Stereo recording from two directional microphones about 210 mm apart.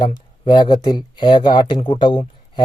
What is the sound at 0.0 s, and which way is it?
Speech, 20° left (ahead or behind).